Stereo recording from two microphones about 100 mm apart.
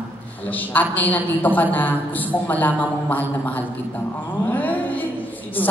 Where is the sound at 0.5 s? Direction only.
15° left (ahead or behind).